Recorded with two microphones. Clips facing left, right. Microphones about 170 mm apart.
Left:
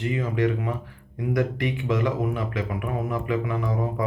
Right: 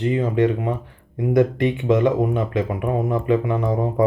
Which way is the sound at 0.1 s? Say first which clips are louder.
Right 5 dB; 35° right (ahead or behind).